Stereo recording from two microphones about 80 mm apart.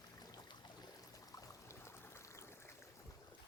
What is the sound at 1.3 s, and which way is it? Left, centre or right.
Pour, left.